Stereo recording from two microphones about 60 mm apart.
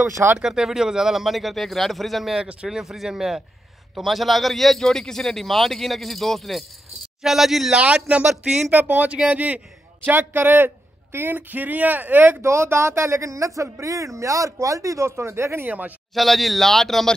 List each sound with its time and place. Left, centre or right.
0.4 s speech: centre
2.4 s speech: centre
7.7 s speech: centre
8.3 s speech: centre
8.7 s speech: right
10.0 s speech: right
12.4 s speech: right
16.2 s speech: centre